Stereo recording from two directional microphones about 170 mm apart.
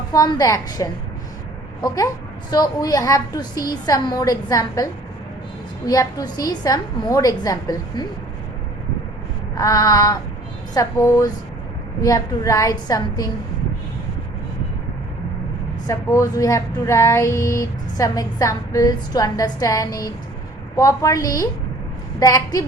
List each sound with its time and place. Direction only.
0.1 s speech: 20° left (ahead or behind)
2.5 s speech: 25° left (ahead or behind)
9.6 s speech: 20° left (ahead or behind)
15.9 s speech: 20° left (ahead or behind)
22.2 s a sound: 20° left (ahead or behind)